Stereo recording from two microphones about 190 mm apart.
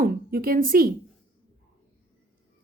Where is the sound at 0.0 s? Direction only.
50° right (ahead or behind).